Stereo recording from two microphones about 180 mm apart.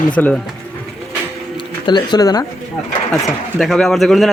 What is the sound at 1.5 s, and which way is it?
Speech, 25° left (ahead or behind).